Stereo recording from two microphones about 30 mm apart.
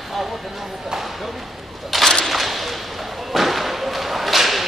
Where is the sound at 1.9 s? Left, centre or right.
Centre.